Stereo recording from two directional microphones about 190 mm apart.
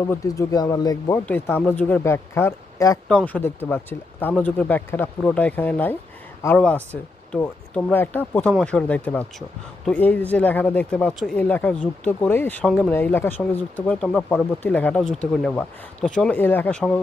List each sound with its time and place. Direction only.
0.0 s speech: 15° left (ahead or behind)
1.2 s speech: 10° left (ahead or behind)